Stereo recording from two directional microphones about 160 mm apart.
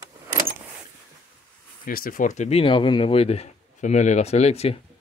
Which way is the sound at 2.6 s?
30° left (ahead or behind).